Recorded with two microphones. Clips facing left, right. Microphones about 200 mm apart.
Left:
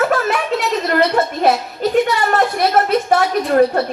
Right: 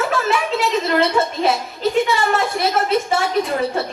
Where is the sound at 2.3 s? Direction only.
50° left (ahead or behind).